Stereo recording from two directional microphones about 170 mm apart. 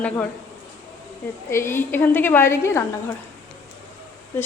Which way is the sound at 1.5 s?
15° left (ahead or behind).